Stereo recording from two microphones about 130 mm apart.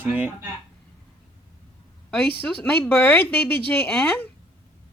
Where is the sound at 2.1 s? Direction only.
15° left (ahead or behind).